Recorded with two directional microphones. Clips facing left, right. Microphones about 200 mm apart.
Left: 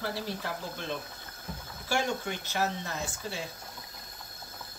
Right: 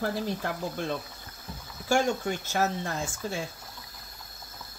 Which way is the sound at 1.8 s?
45° right (ahead or behind).